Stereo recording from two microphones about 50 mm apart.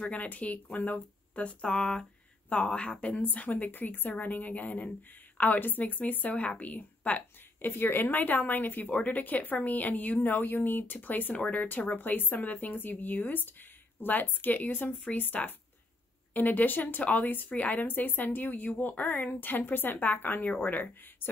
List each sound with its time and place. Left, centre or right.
0.0 s a woman's voice: left
7.7 s speech: left